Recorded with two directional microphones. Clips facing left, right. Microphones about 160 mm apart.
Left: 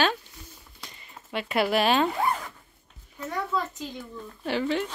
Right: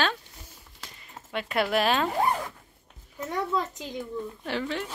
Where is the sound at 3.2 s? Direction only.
20° right (ahead or behind).